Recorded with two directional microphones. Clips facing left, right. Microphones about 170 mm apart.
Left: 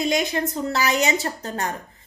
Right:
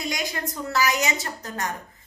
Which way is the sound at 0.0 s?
25° left (ahead or behind).